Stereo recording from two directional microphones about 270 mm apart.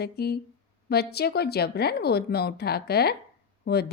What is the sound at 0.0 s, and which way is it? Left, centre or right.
Speech, left.